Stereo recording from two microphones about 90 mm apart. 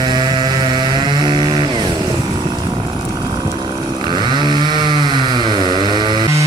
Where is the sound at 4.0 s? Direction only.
60° right (ahead or behind).